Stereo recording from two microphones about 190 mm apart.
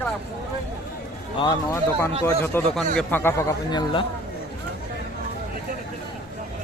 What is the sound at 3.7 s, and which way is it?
Speech, 25° left (ahead or behind).